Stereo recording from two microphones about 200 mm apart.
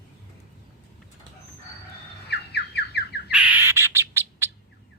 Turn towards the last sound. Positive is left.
turn(degrees=-10)  # may be behind; listen again after turning